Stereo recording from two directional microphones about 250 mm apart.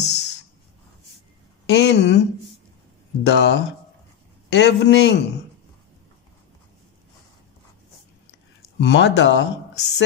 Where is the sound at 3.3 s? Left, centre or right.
Left.